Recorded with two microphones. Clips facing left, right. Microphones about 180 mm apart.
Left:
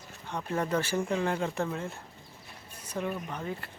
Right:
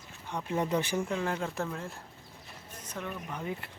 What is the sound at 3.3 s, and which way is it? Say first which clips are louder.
Speech: left 1 dB; 10° right (ahead or behind).